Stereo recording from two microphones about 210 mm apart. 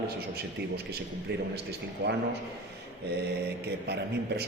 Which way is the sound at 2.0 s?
55° right (ahead or behind).